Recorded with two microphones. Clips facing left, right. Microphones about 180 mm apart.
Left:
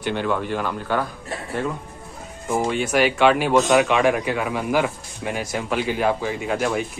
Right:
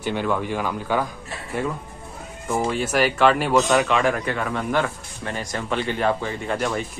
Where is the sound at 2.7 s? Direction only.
Centre (ahead or behind).